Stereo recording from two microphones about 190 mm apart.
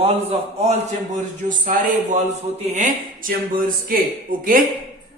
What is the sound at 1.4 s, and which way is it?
A man's voice, 45° right (ahead or behind).